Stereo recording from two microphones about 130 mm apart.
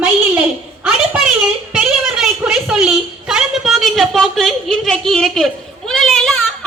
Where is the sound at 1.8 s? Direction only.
5° right (ahead or behind).